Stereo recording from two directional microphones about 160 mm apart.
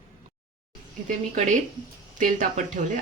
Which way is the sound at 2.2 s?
55° right (ahead or behind).